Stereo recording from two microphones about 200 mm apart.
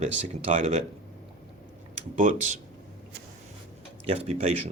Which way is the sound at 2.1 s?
40° right (ahead or behind).